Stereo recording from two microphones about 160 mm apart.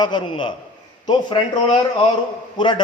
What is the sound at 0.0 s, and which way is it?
Speech, 30° left (ahead or behind).